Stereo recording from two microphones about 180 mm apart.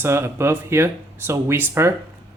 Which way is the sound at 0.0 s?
15° right (ahead or behind).